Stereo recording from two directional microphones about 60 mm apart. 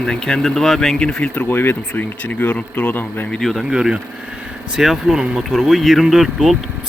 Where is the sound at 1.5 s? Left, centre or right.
Left.